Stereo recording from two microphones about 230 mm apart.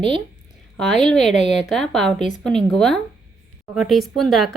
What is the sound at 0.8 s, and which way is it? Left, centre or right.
Speech, centre.